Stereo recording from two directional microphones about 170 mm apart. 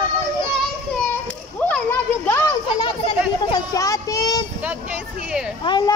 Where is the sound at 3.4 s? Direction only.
20° left (ahead or behind).